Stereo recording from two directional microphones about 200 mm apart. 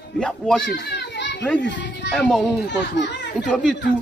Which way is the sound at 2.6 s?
60° left (ahead or behind).